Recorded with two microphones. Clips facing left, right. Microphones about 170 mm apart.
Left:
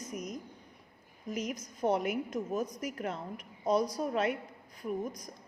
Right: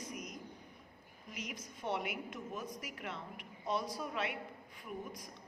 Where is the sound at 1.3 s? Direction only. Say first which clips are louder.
Left 10 dB; 45° left (ahead or behind).